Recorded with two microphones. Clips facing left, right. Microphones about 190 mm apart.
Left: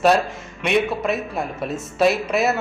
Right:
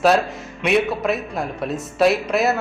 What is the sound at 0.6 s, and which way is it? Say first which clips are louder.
Speech: right 1 dB; centre (ahead or behind).